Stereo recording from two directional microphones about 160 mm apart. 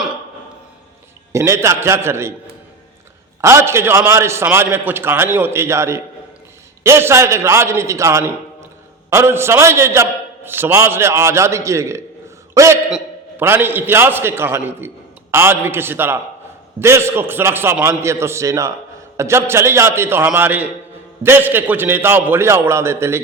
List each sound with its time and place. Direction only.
1.3 s a man's voice: 15° right (ahead or behind)
3.4 s a man's voice: 15° right (ahead or behind)